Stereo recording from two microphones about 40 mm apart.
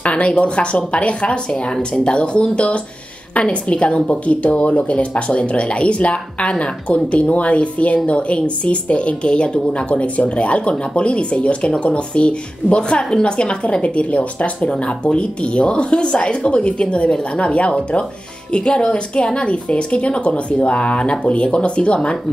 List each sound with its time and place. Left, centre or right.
0.0 s a woman's voice: left